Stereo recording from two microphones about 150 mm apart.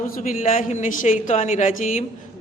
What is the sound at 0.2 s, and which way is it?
A man's voice, 60° left (ahead or behind).